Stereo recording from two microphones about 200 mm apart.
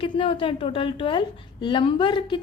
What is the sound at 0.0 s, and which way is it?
A woman's voice, 25° left (ahead or behind).